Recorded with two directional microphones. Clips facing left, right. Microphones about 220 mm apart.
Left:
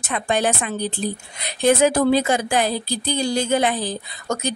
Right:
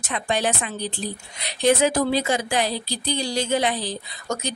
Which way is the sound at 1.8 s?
55° left (ahead or behind).